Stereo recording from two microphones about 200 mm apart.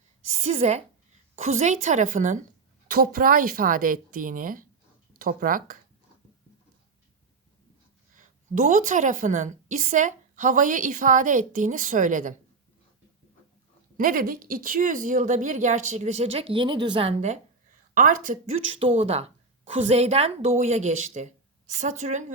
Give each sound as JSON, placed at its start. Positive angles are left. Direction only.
{"t": 0.3, "sound": "a woman's voice", "side_deg": -35}
{"t": 8.1, "sound": "a woman's voice", "side_deg": -40}
{"t": 13.9, "sound": "a woman's voice", "side_deg": -45}
{"t": 18.8, "sound": "a woman's voice", "side_deg": -30}